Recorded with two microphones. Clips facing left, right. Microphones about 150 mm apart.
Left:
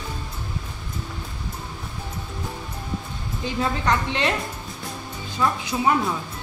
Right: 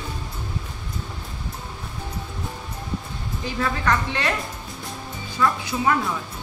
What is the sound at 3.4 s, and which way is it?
Speech, 20° left (ahead or behind).